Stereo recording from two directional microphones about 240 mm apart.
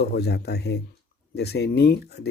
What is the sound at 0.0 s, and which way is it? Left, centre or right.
Speech, left.